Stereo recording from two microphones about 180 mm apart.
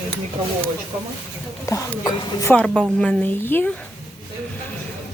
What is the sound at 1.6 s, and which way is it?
Speech, 20° left (ahead or behind).